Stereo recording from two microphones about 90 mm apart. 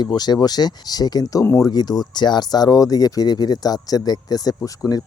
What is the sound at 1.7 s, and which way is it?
Speech, 50° left (ahead or behind).